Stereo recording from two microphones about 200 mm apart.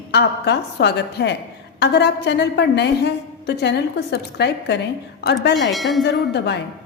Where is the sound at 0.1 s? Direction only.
60° left (ahead or behind).